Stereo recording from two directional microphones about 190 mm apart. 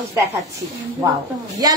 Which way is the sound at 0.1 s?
15° right (ahead or behind).